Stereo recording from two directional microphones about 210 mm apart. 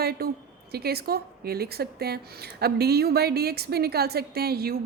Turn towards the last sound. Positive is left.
turn(degrees=-45)  # may be behind; listen again after turning